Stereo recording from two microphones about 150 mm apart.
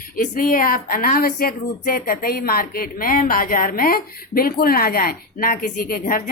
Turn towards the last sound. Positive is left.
turn(degrees=70)  # may be behind; listen again after turning